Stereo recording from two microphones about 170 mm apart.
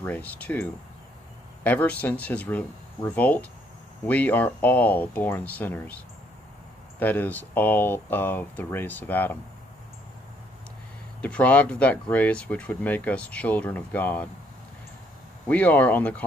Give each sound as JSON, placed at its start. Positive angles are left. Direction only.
{"t": 0.0, "sound": "speech", "side_deg": 10}
{"t": 7.0, "sound": "speech", "side_deg": 10}
{"t": 11.1, "sound": "speech", "side_deg": 10}
{"t": 15.4, "sound": "speech", "side_deg": 10}